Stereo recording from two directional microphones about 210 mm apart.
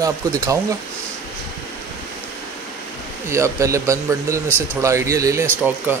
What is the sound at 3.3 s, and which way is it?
Speech, 15° right (ahead or behind).